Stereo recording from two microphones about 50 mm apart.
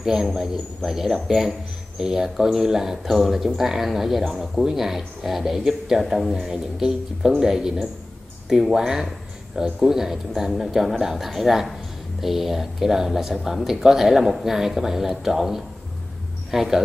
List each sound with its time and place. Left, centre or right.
0.0 s a man's voice: centre